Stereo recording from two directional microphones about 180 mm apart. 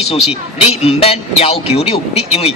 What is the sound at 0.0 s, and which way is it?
A man's voice, 35° left (ahead or behind).